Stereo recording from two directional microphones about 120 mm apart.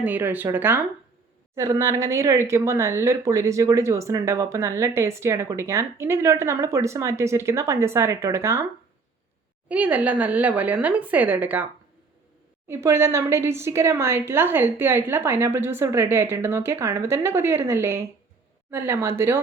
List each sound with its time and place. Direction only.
0.0 s a woman's voice: 15° right (ahead or behind)
9.6 s a woman's voice: 10° right (ahead or behind)
12.6 s speech: 20° right (ahead or behind)